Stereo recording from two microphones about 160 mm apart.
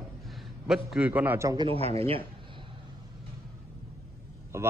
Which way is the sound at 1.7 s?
40° right (ahead or behind).